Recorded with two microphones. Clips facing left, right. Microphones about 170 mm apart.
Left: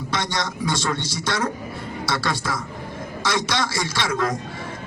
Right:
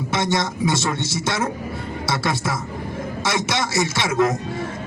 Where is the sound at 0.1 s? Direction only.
25° right (ahead or behind).